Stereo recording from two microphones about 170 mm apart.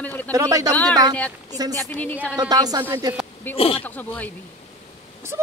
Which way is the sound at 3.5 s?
10° left (ahead or behind).